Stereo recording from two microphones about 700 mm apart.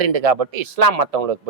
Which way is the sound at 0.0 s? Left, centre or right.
Right.